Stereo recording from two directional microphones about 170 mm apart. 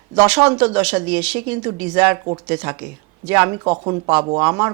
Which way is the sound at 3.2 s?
10° right (ahead or behind).